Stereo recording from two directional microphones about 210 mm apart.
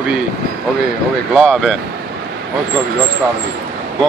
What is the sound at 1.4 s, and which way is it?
Speech, centre (ahead or behind).